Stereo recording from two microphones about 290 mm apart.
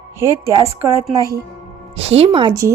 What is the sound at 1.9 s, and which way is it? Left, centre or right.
Speech, centre.